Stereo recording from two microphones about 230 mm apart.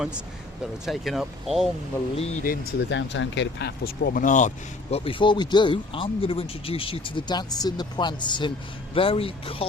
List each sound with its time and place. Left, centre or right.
0.6 s speech: centre
2.1 s speech: left
2.9 s speech: left